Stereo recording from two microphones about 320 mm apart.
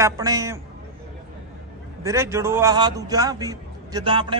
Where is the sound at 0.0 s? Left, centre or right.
Centre.